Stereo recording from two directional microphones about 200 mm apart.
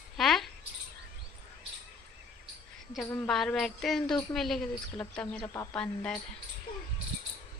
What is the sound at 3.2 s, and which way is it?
A woman's voice, centre (ahead or behind).